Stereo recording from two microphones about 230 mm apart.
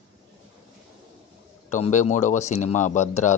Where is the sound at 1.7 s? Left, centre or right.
Left.